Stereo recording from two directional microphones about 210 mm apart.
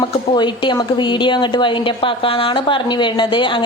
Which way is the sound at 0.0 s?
20° left (ahead or behind).